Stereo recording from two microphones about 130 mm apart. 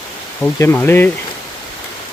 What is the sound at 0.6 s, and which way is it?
Speech, 20° left (ahead or behind).